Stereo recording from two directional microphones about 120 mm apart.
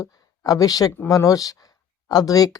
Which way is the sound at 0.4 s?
30° left (ahead or behind).